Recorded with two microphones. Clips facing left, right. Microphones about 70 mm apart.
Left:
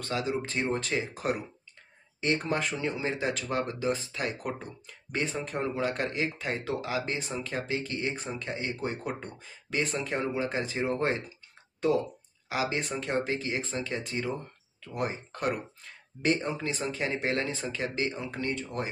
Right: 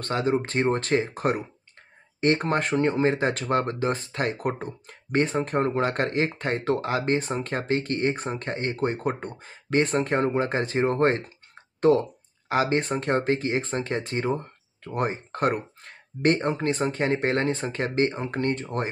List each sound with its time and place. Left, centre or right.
0.0 s speech: right